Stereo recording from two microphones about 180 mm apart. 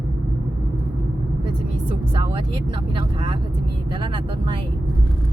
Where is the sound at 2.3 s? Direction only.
30° right (ahead or behind).